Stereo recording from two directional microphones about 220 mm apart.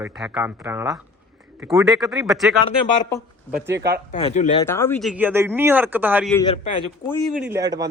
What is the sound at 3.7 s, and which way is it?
Speech, 45° right (ahead or behind).